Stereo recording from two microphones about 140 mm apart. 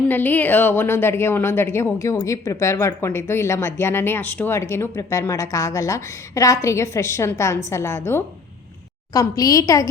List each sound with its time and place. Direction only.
0.1 s a woman's voice: 15° left (ahead or behind)